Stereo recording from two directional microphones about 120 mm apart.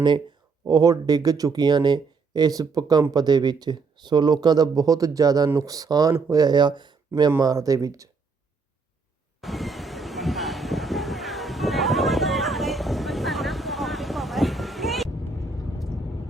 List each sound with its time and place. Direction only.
0.7 s speech: 30° right (ahead or behind)
9.4 s vehicle: centre (ahead or behind)